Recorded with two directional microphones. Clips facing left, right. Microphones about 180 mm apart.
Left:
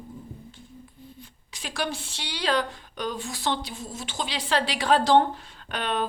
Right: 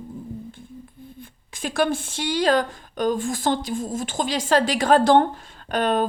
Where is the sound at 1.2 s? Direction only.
50° right (ahead or behind).